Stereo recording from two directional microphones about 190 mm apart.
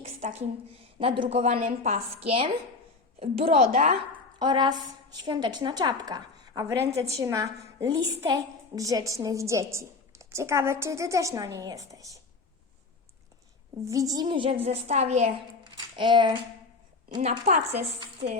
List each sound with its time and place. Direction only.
0.2 s a woman's voice: 40° right (ahead or behind)
4.4 s a woman's voice: 25° right (ahead or behind)
13.8 s a woman's voice: 20° right (ahead or behind); by 15.3 s 35° right (ahead or behind)
15.6 s speech: 25° right (ahead or behind)
17.2 s a woman's voice: 40° right (ahead or behind)